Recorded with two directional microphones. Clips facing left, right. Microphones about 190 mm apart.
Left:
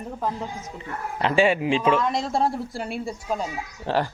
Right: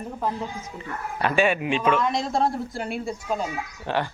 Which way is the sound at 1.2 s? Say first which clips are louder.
Left 2 dB; 30° left (ahead or behind).